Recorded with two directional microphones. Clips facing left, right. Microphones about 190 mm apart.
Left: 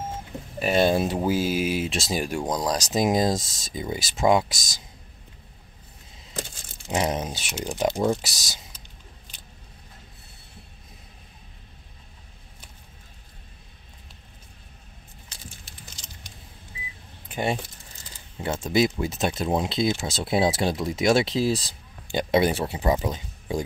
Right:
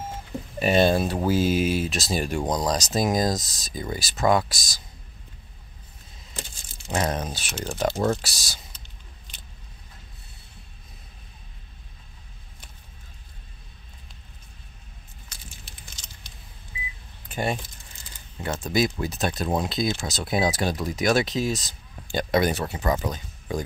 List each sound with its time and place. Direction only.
0.6 s speech: centre (ahead or behind)
0.8 s speech: 20° left (ahead or behind)
1.9 s speech: 25° left (ahead or behind)
2.1 s speech: 10° left (ahead or behind)
6.9 s speech: 20° left (ahead or behind)
17.3 s keys jangling: 15° left (ahead or behind)
18.4 s speech: 25° left (ahead or behind)
22.0 s speech: 20° left (ahead or behind)